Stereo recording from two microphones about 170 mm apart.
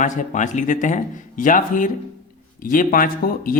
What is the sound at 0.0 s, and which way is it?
Speech, 45° left (ahead or behind).